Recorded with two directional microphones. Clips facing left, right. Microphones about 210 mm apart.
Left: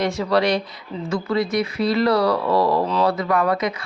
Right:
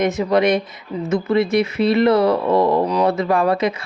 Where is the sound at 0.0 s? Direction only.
20° right (ahead or behind).